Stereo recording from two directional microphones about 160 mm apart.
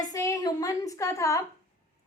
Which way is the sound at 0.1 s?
20° left (ahead or behind).